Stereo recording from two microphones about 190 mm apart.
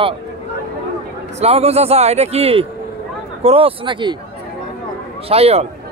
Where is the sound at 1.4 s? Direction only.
35° right (ahead or behind).